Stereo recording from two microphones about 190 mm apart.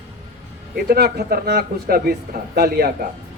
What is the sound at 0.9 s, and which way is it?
Speech, 55° right (ahead or behind).